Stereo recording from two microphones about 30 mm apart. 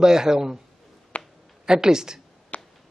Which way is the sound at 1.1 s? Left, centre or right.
Left.